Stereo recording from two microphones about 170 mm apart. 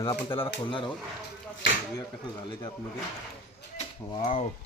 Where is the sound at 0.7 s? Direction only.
30° left (ahead or behind).